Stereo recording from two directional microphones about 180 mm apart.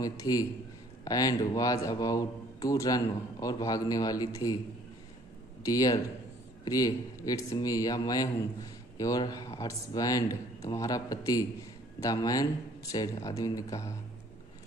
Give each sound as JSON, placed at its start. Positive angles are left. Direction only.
{"t": 0.0, "sound": "speech", "side_deg": 20}
{"t": 5.6, "sound": "speech", "side_deg": 20}